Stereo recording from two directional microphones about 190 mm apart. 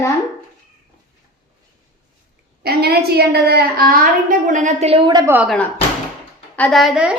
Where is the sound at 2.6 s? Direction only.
55° right (ahead or behind); by 5.3 s 25° right (ahead or behind).